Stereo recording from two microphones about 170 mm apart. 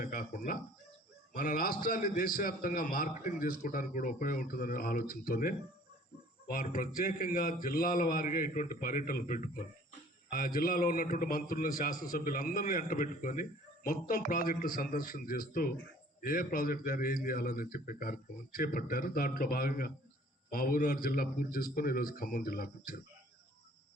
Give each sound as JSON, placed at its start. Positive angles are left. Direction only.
{"t": 0.0, "sound": "a man's voice", "side_deg": 50}